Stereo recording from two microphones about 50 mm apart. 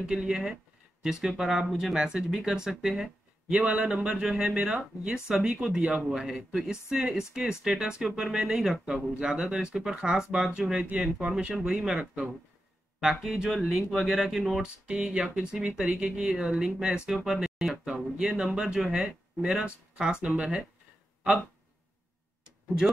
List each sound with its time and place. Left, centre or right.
0.1 s speech: centre
13.0 s speech: centre